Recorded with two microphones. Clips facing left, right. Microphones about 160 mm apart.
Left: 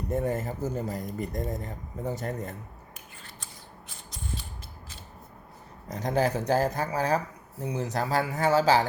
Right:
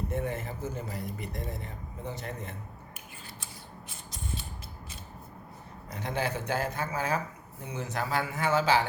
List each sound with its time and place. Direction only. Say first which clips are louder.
0.1 s speech: left 5 dB; 40° left (ahead or behind)
5.9 s speech: left 6 dB; 40° left (ahead or behind)